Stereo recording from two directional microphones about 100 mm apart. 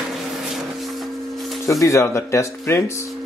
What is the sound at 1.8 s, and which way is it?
Speech, 25° left (ahead or behind).